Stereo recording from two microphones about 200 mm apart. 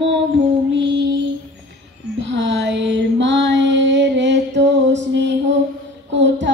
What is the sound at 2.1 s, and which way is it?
Female singing, 65° right (ahead or behind).